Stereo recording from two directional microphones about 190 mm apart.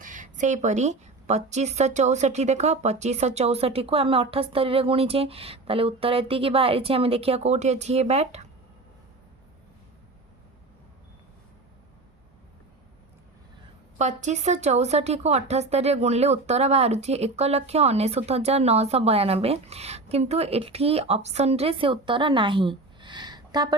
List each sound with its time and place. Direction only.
0.0 s speech: 45° right (ahead or behind)
14.0 s speech: 40° right (ahead or behind); by 23.7 s 20° right (ahead or behind)